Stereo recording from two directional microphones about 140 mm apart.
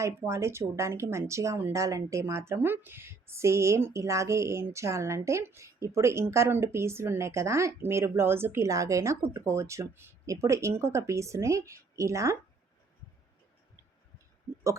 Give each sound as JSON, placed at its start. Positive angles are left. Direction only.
{"t": 0.0, "sound": "a woman's voice", "side_deg": -20}